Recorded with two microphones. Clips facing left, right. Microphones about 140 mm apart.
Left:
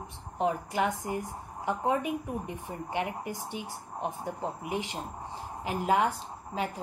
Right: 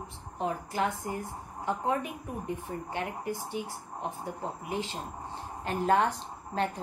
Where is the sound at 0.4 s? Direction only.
15° left (ahead or behind).